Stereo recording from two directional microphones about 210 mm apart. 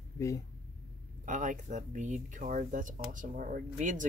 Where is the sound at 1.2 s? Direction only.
40° right (ahead or behind).